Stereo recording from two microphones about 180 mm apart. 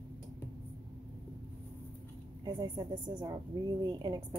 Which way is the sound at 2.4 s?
25° right (ahead or behind).